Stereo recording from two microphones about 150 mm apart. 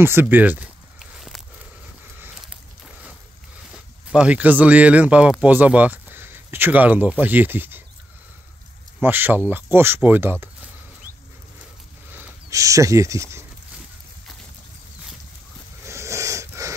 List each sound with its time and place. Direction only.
0.0 s speech: 15° right (ahead or behind)
0.9 s a sound: centre (ahead or behind)
3.7 s speech: 5° right (ahead or behind)
9.0 s speech: 15° right (ahead or behind)
12.1 s speech: 15° right (ahead or behind)
15.8 s a sound: 20° right (ahead or behind)